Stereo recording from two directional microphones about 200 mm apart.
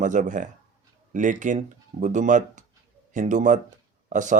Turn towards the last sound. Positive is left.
turn(degrees=-40)  # may be behind; listen again after turning